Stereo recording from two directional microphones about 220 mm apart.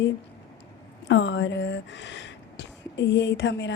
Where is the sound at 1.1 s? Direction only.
55° left (ahead or behind).